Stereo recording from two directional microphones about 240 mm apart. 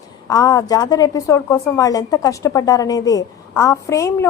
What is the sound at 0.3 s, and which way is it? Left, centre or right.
A woman's voice, centre.